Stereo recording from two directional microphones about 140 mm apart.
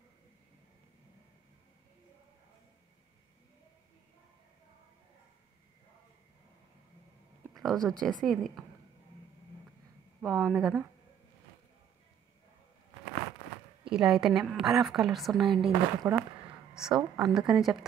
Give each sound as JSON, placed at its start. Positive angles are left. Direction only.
{"t": 7.5, "sound": "a woman's voice", "side_deg": 5}
{"t": 10.2, "sound": "a woman's voice", "side_deg": 0}
{"t": 13.9, "sound": "a woman's voice", "side_deg": -5}
{"t": 16.0, "sound": "speech", "side_deg": -20}
{"t": 16.7, "sound": "a woman's voice", "side_deg": -5}